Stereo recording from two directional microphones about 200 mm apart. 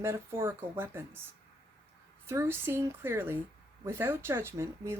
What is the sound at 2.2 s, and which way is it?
Speech, 10° right (ahead or behind).